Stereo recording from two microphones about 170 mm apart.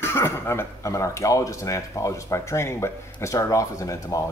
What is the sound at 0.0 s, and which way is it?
Speech, 15° left (ahead or behind).